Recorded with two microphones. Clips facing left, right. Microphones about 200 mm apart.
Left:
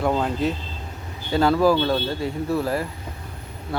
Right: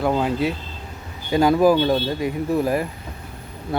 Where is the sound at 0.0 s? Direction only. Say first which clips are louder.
Right 2 dB; 5° right (ahead or behind).